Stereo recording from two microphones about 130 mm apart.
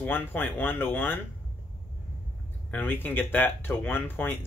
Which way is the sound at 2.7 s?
15° left (ahead or behind).